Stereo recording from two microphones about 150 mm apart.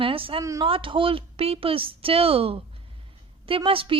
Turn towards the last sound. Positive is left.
turn(degrees=-35)  # may be behind; listen again after turning